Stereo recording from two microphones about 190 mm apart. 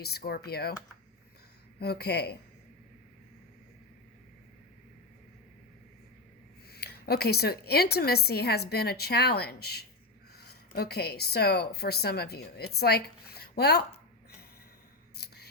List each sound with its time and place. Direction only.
0.0 s a woman's voice: 55° left (ahead or behind)
1.8 s a woman's voice: 55° left (ahead or behind)
6.7 s a woman's voice: 55° left (ahead or behind)